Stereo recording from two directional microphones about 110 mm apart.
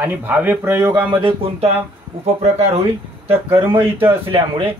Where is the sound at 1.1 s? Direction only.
50° right (ahead or behind); by 2.8 s 70° right (ahead or behind).